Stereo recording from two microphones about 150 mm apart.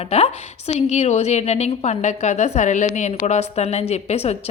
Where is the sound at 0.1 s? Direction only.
45° left (ahead or behind).